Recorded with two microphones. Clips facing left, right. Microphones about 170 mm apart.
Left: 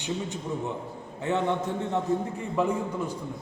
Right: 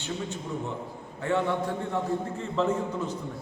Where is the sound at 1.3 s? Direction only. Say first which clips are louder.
Even; 20° left (ahead or behind).